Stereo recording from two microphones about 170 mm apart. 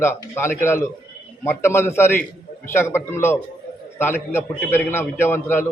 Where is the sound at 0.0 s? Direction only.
15° left (ahead or behind).